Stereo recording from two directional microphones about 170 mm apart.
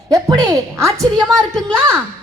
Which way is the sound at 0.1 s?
20° right (ahead or behind).